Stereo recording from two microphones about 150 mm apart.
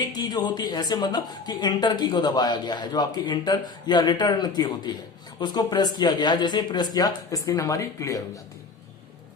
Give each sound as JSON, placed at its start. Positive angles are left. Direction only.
{"t": 0.0, "sound": "a woman's voice", "side_deg": 25}